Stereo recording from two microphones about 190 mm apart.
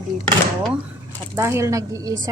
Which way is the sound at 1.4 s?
15° right (ahead or behind).